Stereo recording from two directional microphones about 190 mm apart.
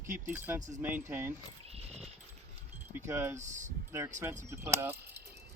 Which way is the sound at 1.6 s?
35° right (ahead or behind).